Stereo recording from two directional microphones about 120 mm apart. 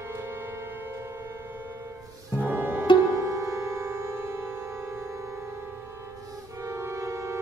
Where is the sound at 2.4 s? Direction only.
15° right (ahead or behind).